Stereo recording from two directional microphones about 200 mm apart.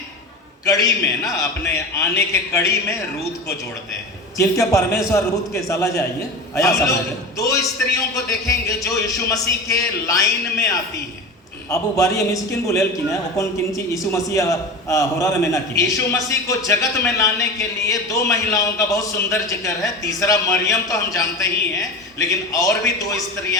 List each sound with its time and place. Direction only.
0.6 s a man's voice: 15° left (ahead or behind)
4.4 s a man's voice: 15° left (ahead or behind)